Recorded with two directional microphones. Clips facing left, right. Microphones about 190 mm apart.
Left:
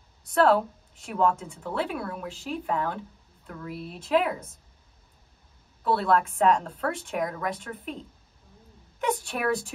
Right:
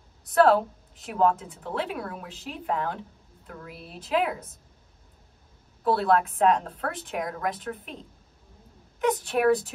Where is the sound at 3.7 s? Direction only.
Centre (ahead or behind).